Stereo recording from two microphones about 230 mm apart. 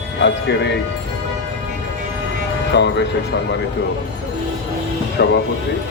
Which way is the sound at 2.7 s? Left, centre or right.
Left.